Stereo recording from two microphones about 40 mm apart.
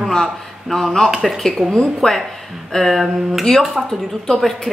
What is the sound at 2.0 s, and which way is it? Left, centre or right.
Speech, centre.